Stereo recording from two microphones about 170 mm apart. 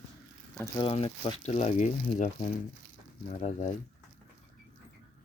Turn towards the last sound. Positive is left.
turn(degrees=40)  # may be behind; listen again after turning